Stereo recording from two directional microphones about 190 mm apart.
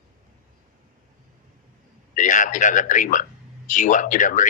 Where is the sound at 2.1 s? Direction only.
40° left (ahead or behind).